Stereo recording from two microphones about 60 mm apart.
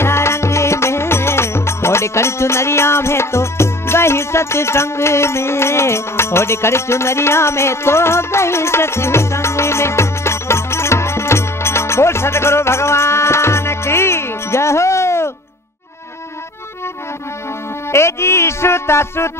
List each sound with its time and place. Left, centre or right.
0.0 s music: left
17.9 s speech: left